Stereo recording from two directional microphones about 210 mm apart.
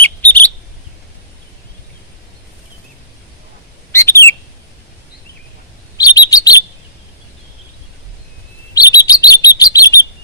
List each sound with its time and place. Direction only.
0.0 s bird: 10° left (ahead or behind)
3.9 s bird: 15° left (ahead or behind)
6.0 s chirp: 20° left (ahead or behind)
8.7 s chirp: 15° left (ahead or behind)